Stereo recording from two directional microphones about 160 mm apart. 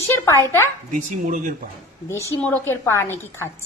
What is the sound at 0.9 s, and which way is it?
Speech, 55° right (ahead or behind).